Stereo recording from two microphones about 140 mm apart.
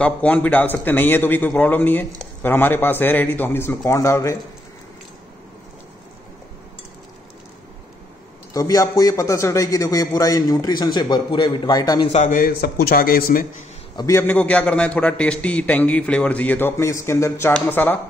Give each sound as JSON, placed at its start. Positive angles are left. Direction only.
{"t": 0.0, "sound": "a man's voice", "side_deg": 10}
{"t": 8.5, "sound": "a man's voice", "side_deg": 25}
{"t": 12.1, "sound": "a man's voice", "side_deg": 55}
{"t": 12.4, "sound": "a man's voice", "side_deg": 90}
{"t": 13.9, "sound": "a man's voice", "side_deg": 20}